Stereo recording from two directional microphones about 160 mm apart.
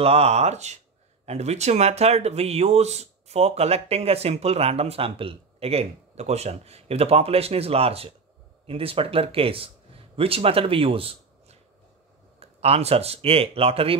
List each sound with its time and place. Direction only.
0.0 s speech: 40° right (ahead or behind)